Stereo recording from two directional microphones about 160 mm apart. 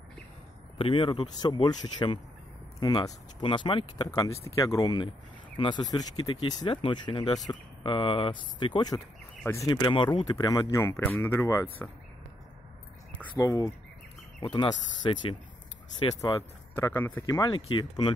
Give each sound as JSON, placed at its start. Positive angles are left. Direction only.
{"t": 0.7, "sound": "speech", "side_deg": 35}
{"t": 9.4, "sound": "speech", "side_deg": 15}
{"t": 9.7, "sound": "speech", "side_deg": 30}
{"t": 13.4, "sound": "speech", "side_deg": 20}